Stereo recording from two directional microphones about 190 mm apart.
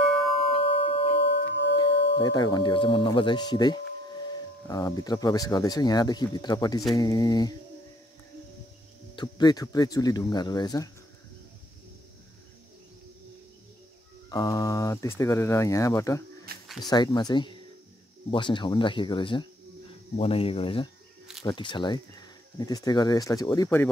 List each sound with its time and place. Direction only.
0.0 s music: 30° left (ahead or behind)
1.2 s singing bowl: 70° left (ahead or behind)
2.1 s speech: 20° left (ahead or behind)
9.1 s speech: 20° left (ahead or behind)
14.3 s speech: 20° left (ahead or behind)
16.6 s a sound: centre (ahead or behind)
16.9 s speech: 20° left (ahead or behind)